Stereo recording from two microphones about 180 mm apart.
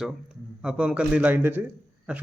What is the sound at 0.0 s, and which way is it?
A man's voice, 5° right (ahead or behind).